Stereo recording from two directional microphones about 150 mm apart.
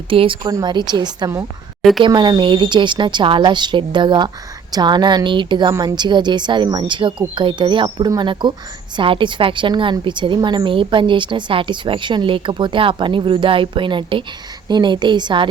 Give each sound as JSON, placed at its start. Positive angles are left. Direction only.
{"t": 0.1, "sound": "a woman's voice", "side_deg": -35}
{"t": 1.8, "sound": "speech", "side_deg": 0}
{"t": 2.0, "sound": "a woman's voice", "side_deg": -30}